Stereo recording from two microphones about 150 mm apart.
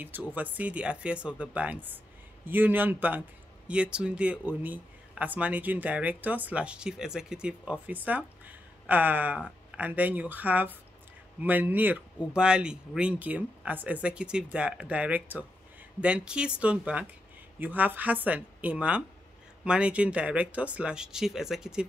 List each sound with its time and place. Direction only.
0.0 s speech: 10° right (ahead or behind)